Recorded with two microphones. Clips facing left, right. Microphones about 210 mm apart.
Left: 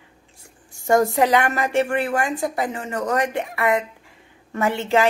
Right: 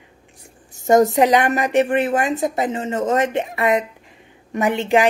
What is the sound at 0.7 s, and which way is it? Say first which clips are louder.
A woman's voice: right 4 dB; 20° right (ahead or behind).